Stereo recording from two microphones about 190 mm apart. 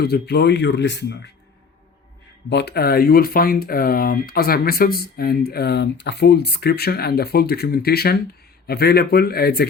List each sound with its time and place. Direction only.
0.0 s speech: 60° left (ahead or behind)
2.5 s speech: 60° left (ahead or behind)